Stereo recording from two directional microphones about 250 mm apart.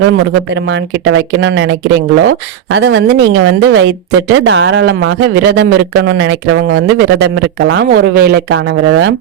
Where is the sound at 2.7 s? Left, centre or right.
Right.